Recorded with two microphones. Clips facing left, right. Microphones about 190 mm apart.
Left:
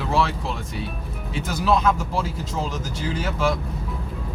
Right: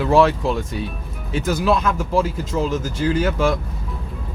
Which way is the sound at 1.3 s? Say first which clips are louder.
Right 7 dB; 50° right (ahead or behind).